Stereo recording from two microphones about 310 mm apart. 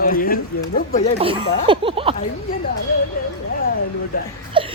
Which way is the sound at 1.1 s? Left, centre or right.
Centre.